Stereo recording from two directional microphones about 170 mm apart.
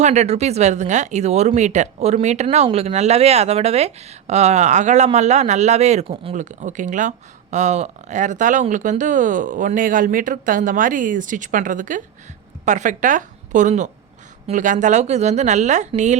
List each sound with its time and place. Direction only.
0.0 s a woman's voice: 40° right (ahead or behind)